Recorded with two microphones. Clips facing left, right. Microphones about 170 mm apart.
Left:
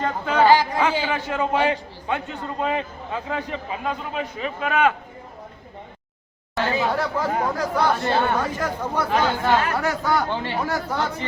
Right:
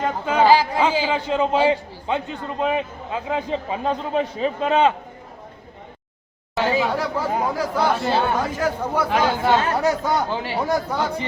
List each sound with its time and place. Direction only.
0.0 s a man's voice: 10° right (ahead or behind)
3.7 s a man's voice: 30° right (ahead or behind)
6.7 s speech: 10° right (ahead or behind)
9.6 s a man's voice: 20° right (ahead or behind)